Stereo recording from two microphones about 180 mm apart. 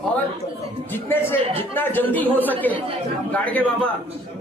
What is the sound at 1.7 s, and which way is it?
A man's voice, 10° left (ahead or behind).